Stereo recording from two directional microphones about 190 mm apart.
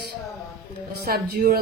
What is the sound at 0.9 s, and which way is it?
Speech, 50° right (ahead or behind).